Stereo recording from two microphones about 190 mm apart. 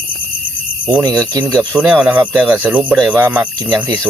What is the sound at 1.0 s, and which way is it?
Speech, 20° right (ahead or behind).